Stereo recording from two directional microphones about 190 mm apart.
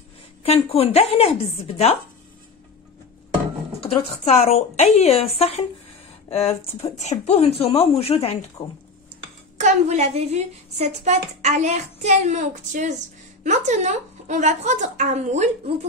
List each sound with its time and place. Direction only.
0.4 s speech: 30° left (ahead or behind)
3.8 s speech: 35° left (ahead or behind)
8.6 s speech: 20° left (ahead or behind)
9.6 s a woman's voice: 35° right (ahead or behind)